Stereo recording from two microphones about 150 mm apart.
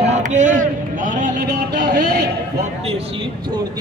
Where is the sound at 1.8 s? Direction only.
90° right.